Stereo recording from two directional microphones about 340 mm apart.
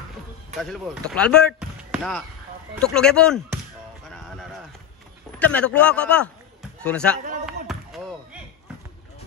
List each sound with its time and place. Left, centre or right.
0.6 s speech: centre
5.4 s a man's voice: centre
7.2 s speech: right
7.6 s a sound: centre